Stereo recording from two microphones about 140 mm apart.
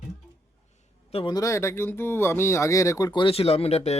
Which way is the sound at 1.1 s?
40° left (ahead or behind).